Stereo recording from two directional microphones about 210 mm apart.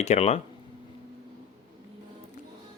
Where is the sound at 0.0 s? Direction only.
30° left (ahead or behind).